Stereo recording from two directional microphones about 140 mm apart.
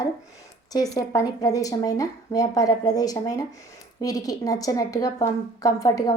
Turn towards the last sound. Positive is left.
turn(degrees=25)  # may be behind; listen again after turning